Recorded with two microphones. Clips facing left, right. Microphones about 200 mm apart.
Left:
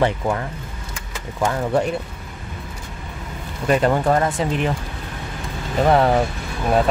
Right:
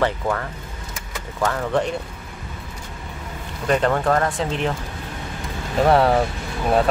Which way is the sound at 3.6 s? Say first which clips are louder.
Left 2 dB; 10° left (ahead or behind).